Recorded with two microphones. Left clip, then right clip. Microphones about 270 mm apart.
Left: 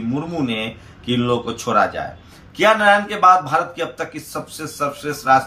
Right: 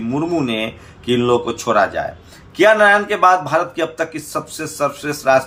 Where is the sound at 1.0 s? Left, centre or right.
Centre.